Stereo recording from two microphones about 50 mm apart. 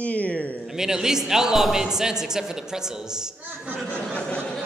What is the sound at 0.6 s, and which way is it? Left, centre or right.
A man's voice, centre.